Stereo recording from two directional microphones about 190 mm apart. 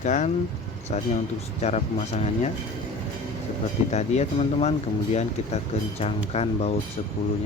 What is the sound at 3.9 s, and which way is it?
Speech, 35° left (ahead or behind).